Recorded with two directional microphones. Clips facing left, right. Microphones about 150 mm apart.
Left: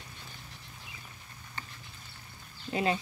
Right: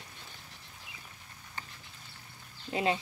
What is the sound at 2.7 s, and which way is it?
Speech, 20° right (ahead or behind).